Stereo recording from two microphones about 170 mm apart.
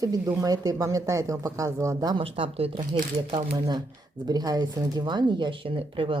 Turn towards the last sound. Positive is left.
turn(degrees=-30)  # may be behind; listen again after turning